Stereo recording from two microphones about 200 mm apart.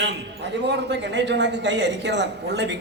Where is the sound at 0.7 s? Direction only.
60° right (ahead or behind).